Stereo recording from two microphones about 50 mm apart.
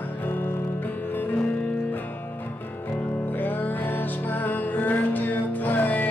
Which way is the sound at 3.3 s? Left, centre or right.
Left.